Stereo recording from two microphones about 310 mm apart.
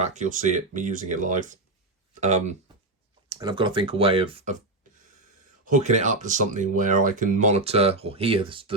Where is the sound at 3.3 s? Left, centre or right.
Centre.